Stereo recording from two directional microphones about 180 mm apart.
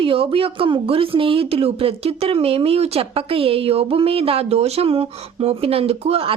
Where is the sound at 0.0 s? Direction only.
30° right (ahead or behind).